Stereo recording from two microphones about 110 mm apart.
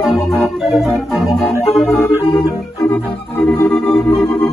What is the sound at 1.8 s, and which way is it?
Organ, 30° left (ahead or behind).